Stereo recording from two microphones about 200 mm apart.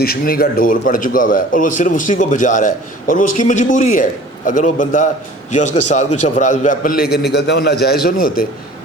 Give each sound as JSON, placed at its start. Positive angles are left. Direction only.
{"t": 0.0, "sound": "a man's voice", "side_deg": 50}